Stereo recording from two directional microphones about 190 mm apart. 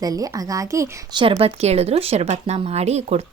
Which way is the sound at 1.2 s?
30° right (ahead or behind).